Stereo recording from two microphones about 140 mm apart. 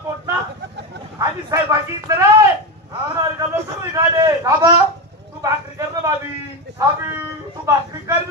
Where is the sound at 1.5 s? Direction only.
25° right (ahead or behind).